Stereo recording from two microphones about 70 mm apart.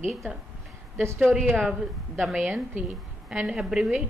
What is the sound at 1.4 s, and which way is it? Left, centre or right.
Speech, centre.